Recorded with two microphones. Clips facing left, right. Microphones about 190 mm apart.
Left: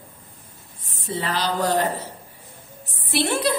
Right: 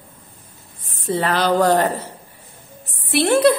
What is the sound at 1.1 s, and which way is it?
Speech, 60° right (ahead or behind).